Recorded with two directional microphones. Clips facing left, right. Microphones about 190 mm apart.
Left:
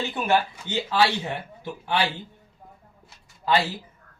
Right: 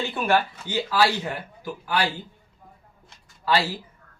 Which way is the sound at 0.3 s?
20° left (ahead or behind).